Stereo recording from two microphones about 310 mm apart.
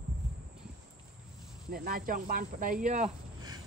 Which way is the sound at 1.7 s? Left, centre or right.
Right.